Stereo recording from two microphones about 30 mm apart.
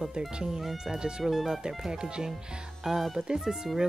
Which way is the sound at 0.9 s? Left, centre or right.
Right.